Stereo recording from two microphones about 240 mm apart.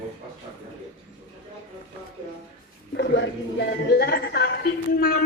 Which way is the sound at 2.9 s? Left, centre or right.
Left.